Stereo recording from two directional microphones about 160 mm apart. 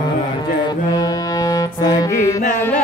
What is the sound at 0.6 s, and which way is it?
Music, 25° left (ahead or behind).